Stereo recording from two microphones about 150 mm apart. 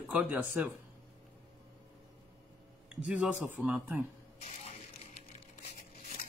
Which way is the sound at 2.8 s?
5° right (ahead or behind).